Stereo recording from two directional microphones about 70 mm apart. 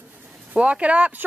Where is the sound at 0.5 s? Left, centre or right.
Centre.